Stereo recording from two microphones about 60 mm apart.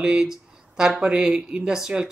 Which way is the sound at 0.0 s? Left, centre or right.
Centre.